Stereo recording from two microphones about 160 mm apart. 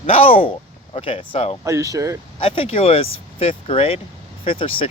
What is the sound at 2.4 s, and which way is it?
Speech, 35° left (ahead or behind).